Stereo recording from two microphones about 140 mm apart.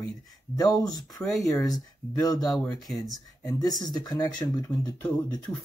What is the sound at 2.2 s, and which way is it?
Speech, 25° left (ahead or behind).